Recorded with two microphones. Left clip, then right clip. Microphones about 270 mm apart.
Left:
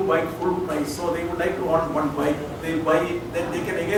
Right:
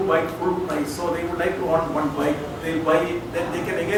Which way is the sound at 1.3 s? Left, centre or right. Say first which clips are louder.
Right 1 dB; centre.